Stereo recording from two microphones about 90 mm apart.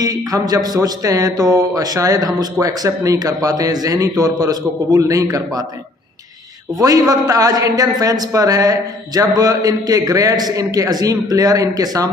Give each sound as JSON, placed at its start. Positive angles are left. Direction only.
{"t": 0.0, "sound": "a man's voice", "side_deg": -40}
{"t": 6.7, "sound": "a man's voice", "side_deg": -45}